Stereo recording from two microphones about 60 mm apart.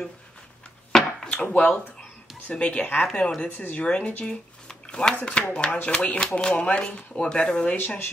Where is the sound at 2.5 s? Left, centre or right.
Left.